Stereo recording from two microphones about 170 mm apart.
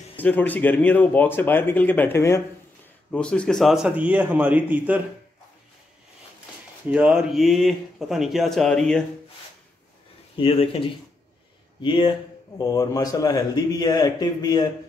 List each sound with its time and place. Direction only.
0.2 s a man's voice: 10° left (ahead or behind); by 5.0 s 10° right (ahead or behind)
6.9 s speech: 5° right (ahead or behind)
10.3 s speech: 30° left (ahead or behind)